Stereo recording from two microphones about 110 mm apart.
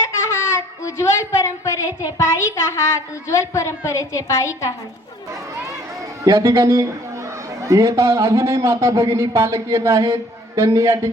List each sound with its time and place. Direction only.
0.3 s a woman's voice: 25° left (ahead or behind)
6.2 s a man's voice: 30° right (ahead or behind)